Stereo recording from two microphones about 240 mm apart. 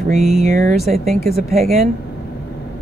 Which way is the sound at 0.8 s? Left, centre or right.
Centre.